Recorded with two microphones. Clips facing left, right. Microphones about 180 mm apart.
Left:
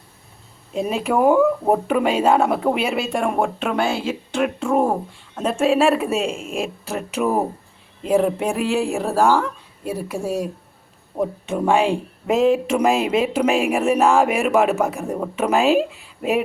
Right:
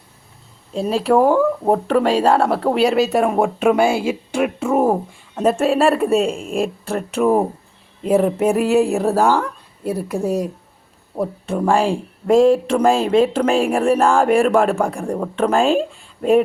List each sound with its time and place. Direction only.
1.0 s speech: 5° left (ahead or behind)
9.0 s speech: 15° right (ahead or behind)
9.8 s speech: 10° left (ahead or behind)
11.2 s speech: centre (ahead or behind)